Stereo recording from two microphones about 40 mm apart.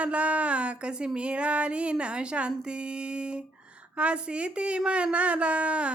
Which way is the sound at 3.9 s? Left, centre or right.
Right.